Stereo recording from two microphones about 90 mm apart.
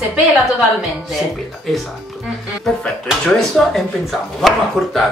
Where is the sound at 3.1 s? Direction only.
Centre (ahead or behind).